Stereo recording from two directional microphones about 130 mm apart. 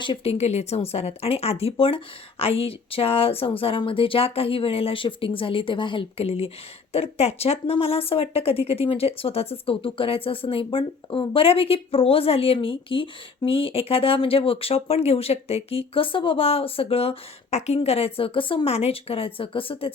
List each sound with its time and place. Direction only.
0.0 s speech: 45° left (ahead or behind)